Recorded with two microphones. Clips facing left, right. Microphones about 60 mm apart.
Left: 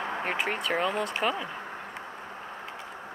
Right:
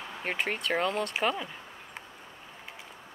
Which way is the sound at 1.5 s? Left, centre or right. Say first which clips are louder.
Left 8 dB; left.